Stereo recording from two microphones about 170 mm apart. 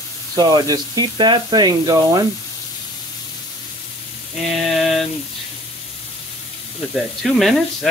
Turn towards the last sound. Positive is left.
turn(degrees=0)  # may be behind; listen again after turning